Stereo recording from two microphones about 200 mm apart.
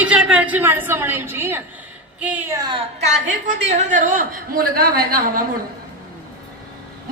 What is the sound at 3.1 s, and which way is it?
A woman's voice, 40° right (ahead or behind).